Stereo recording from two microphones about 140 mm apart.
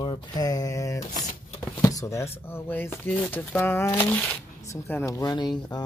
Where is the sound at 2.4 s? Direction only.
15° left (ahead or behind).